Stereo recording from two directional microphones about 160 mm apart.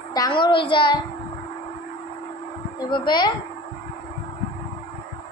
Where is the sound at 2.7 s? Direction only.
30° left (ahead or behind).